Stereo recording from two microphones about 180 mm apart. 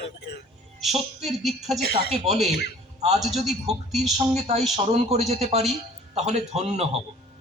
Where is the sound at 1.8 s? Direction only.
60° left (ahead or behind).